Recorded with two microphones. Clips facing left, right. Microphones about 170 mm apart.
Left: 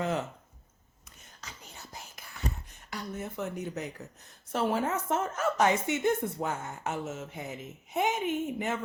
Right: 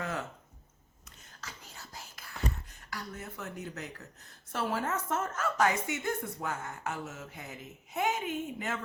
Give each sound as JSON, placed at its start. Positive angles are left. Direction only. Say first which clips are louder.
{"t": 0.0, "sound": "speech", "louder": "left 6 dB", "side_deg": 20}
{"t": 1.2, "sound": "a sound", "louder": "even", "side_deg": 20}
{"t": 2.9, "sound": "a woman's voice", "louder": "left 5 dB", "side_deg": 20}